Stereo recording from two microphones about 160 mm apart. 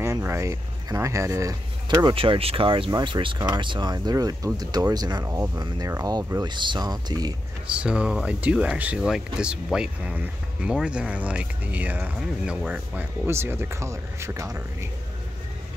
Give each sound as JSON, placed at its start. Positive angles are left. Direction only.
{"t": 0.0, "sound": "speech", "side_deg": -15}
{"t": 7.8, "sound": "speech", "side_deg": -5}